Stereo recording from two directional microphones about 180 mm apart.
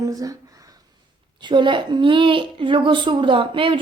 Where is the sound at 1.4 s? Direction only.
25° right (ahead or behind).